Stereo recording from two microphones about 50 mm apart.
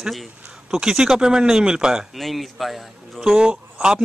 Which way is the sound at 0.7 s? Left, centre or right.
Centre.